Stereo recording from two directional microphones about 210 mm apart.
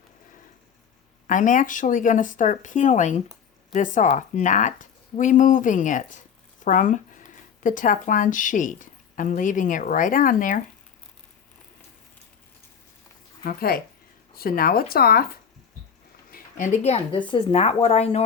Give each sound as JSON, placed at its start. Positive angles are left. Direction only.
{"t": 1.3, "sound": "speech", "side_deg": 40}
{"t": 13.4, "sound": "a woman's voice", "side_deg": 45}